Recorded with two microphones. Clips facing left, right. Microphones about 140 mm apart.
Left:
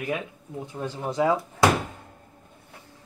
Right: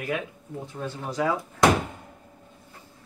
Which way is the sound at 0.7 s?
20° left (ahead or behind).